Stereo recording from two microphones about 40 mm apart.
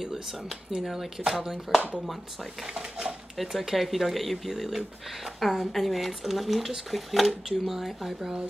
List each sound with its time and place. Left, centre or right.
0.0 s speech: centre
2.6 s dishes: centre
3.3 s speech: centre